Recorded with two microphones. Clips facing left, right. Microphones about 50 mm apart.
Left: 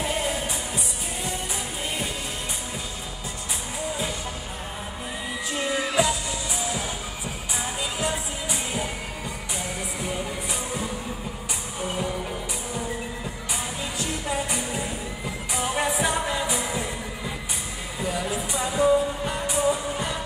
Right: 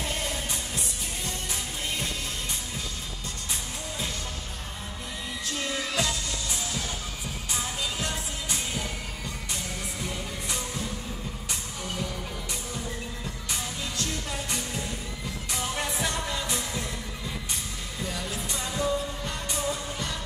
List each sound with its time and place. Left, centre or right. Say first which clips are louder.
0.0 s music: left 5 dB; centre
5.5 s music: left 5 dB; centre
10.0 s music: left 5 dB; centre
13.5 s music: left 3 dB; centre
17.9 s music: left 7 dB; centre